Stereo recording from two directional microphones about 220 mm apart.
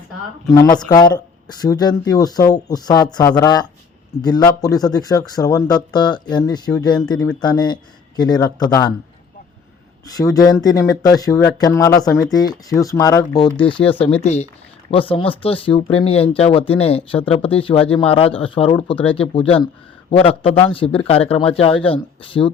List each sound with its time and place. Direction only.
0.5 s speech: 15° left (ahead or behind)
10.2 s speech: 15° left (ahead or behind)